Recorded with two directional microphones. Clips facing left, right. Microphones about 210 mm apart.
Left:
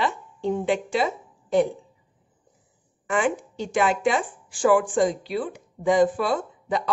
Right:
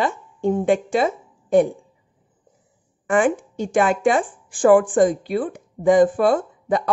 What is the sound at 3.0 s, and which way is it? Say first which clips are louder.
Speech: right 5 dB; 50° right (ahead or behind).